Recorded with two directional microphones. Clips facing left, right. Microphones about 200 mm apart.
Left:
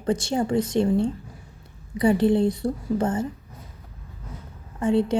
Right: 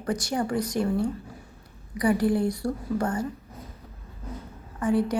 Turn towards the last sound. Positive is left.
turn(degrees=25)  # may be behind; listen again after turning